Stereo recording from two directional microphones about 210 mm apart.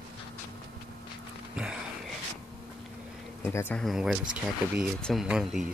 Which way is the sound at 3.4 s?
10° left (ahead or behind).